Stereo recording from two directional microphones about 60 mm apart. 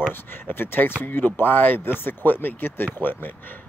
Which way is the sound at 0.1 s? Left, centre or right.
Left.